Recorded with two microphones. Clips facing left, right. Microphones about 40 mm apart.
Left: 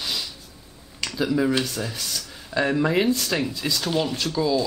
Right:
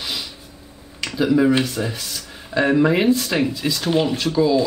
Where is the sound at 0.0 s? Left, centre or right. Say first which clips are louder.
Right 1 dB; centre.